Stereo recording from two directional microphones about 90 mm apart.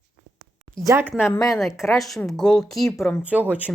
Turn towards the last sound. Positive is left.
turn(degrees=-20)  # may be behind; listen again after turning